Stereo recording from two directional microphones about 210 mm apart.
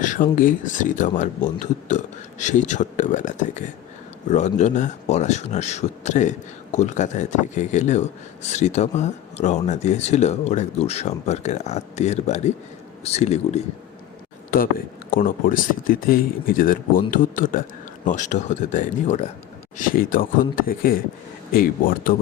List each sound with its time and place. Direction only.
0.0 s speech: 40° left (ahead or behind)
14.5 s speech: 40° left (ahead or behind)